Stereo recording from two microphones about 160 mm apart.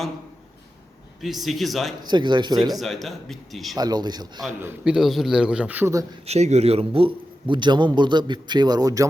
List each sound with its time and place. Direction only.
1.2 s a man's voice: centre (ahead or behind)
2.0 s a man's voice: 30° right (ahead or behind)
2.7 s a man's voice: centre (ahead or behind)
3.8 s a man's voice: 25° right (ahead or behind)
4.6 s a man's voice: 5° right (ahead or behind)
6.2 s a man's voice: 45° right (ahead or behind); by 9.0 s 20° right (ahead or behind)